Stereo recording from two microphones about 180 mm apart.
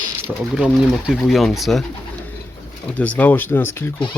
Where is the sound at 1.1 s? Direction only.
Centre (ahead or behind).